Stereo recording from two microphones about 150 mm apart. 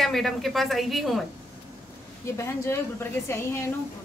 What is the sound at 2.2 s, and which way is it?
A woman's voice, 20° left (ahead or behind).